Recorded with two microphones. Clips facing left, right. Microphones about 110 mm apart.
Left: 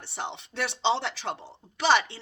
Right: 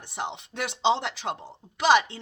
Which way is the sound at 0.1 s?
15° right (ahead or behind).